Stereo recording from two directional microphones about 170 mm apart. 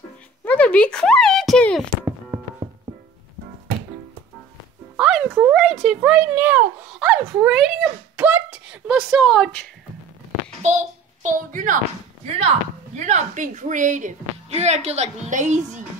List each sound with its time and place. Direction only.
0.5 s speech: 5° left (ahead or behind)
4.9 s a sound: 5° right (ahead or behind)
5.9 s speech: 5° right (ahead or behind)
8.2 s a sound: 10° right (ahead or behind)
10.6 s a child's voice: 45° right (ahead or behind)
12.4 s a woman's voice: 40° right (ahead or behind)